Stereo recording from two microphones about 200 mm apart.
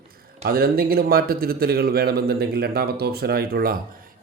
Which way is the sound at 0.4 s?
50° right (ahead or behind).